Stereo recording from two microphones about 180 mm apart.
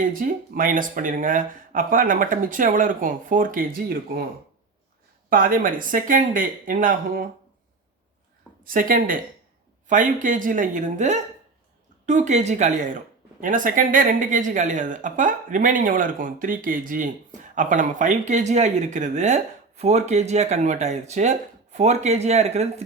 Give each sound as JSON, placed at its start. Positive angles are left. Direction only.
{"t": 0.0, "sound": "speech", "side_deg": -50}
{"t": 5.3, "sound": "speech", "side_deg": -50}
{"t": 8.6, "sound": "speech", "side_deg": -50}